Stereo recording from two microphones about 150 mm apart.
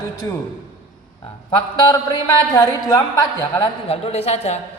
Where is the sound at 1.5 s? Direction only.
30° left (ahead or behind).